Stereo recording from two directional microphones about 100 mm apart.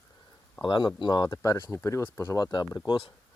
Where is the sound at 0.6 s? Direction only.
55° left (ahead or behind).